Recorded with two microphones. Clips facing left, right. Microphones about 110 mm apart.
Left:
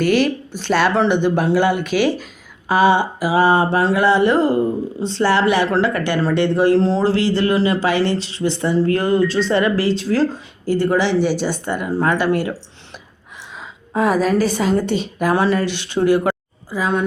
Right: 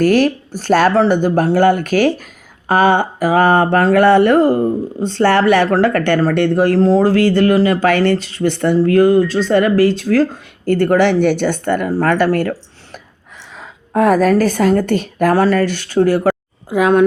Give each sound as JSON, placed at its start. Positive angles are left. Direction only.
{"t": 0.0, "sound": "speech", "side_deg": -45}
{"t": 16.6, "sound": "speech", "side_deg": -60}